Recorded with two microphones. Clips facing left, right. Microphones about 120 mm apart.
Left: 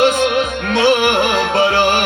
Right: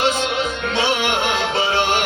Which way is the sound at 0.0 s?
55° left (ahead or behind).